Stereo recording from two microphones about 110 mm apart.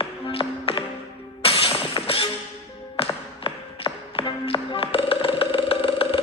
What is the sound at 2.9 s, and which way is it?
Tap, 55° left (ahead or behind).